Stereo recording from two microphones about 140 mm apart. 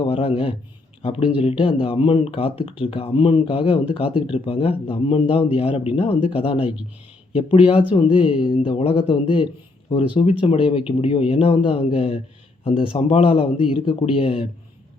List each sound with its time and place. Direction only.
0.0 s speech: 40° left (ahead or behind)